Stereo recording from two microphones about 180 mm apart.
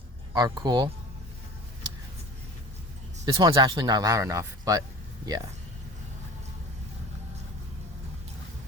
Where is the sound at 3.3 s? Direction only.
25° right (ahead or behind).